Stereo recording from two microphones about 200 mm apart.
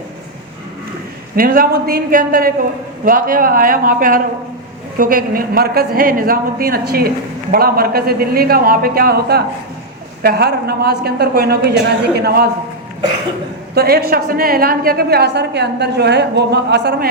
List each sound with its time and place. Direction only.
1.4 s a woman's voice: 45° right (ahead or behind)
13.7 s a woman's voice: 50° right (ahead or behind)